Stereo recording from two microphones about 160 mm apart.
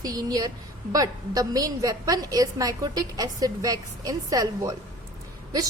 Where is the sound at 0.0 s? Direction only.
25° right (ahead or behind).